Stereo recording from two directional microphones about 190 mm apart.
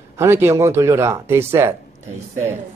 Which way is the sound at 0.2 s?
15° right (ahead or behind).